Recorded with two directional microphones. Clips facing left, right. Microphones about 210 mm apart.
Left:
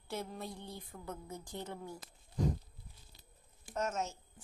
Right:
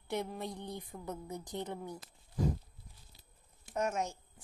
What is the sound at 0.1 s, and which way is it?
A woman's voice, 15° right (ahead or behind).